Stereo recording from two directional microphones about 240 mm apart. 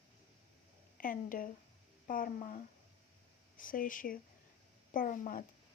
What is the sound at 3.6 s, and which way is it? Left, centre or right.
Speech, left.